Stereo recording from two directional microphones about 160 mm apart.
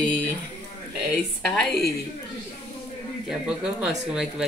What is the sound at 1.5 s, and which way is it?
Speech, centre (ahead or behind).